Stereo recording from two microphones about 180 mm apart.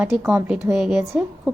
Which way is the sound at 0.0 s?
5° right (ahead or behind).